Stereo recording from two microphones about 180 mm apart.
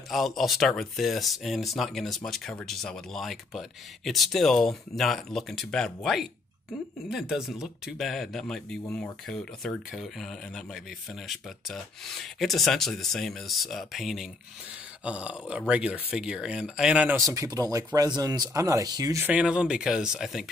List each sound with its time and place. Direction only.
0.1 s speech: centre (ahead or behind)
17.2 s speech: 20° right (ahead or behind); by 20.4 s 5° right (ahead or behind)